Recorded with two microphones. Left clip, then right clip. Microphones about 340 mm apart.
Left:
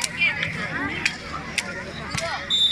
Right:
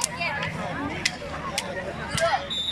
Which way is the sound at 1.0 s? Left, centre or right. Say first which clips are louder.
Left 2 dB; centre.